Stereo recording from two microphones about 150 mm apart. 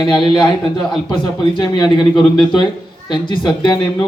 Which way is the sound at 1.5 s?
30° left (ahead or behind).